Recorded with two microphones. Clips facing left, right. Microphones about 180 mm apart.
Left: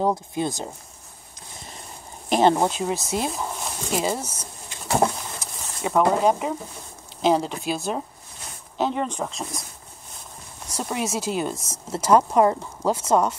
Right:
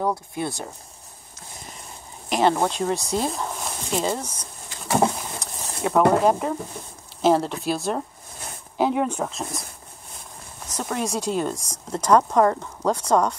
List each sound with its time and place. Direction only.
0.0 s speech: 20° left (ahead or behind)
2.4 s speech: 20° left (ahead or behind)
2.7 s speech: 5° left (ahead or behind)
10.7 s speech: 10° left (ahead or behind)